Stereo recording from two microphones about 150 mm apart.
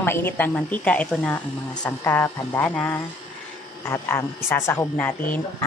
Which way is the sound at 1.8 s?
15° left (ahead or behind).